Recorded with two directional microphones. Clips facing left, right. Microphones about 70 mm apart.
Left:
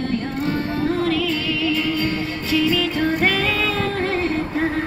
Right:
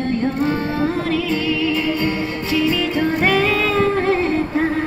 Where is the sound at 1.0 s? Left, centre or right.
Right.